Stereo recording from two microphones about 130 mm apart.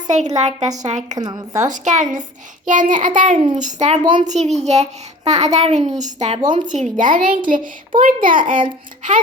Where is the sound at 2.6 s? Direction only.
85° right.